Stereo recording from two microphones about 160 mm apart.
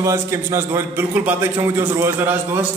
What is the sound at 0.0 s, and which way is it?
A man's voice, 20° right (ahead or behind).